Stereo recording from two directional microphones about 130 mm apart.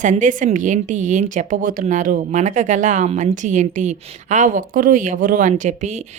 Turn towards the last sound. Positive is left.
turn(degrees=-65)  # may be behind; listen again after turning